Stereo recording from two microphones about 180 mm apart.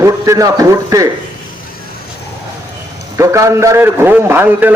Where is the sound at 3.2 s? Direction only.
15° right (ahead or behind).